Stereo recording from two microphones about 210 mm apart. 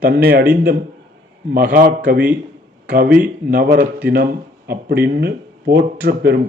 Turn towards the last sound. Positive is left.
turn(degrees=-50)  # may be behind; listen again after turning